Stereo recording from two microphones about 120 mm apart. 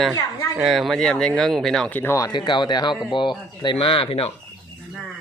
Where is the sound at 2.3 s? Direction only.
40° left (ahead or behind).